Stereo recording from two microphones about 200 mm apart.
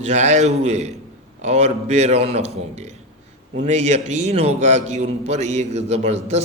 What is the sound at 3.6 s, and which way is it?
A man's voice, 35° right (ahead or behind).